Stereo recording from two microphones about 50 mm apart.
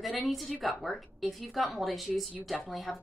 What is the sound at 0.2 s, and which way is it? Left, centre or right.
Speech, centre.